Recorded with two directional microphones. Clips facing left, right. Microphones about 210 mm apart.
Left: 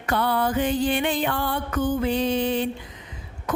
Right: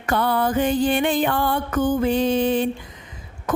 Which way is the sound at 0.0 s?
45° right (ahead or behind).